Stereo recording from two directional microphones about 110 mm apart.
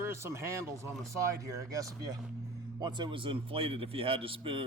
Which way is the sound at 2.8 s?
45° right (ahead or behind).